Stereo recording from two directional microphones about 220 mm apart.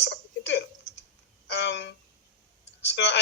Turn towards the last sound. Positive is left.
turn(degrees=55)  # may be behind; listen again after turning